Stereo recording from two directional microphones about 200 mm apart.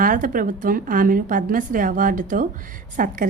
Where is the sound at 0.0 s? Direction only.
40° right (ahead or behind).